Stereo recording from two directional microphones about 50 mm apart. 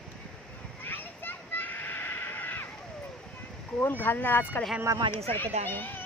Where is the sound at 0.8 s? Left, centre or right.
Left.